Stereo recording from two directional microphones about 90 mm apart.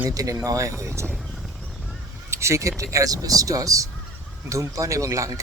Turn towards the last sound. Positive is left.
turn(degrees=-35)  # may be behind; listen again after turning